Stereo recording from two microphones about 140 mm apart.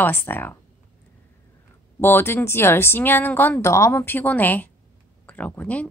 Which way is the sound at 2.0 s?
15° left (ahead or behind).